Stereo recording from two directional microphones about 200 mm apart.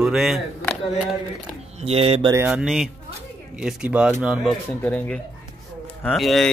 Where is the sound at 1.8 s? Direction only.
30° right (ahead or behind).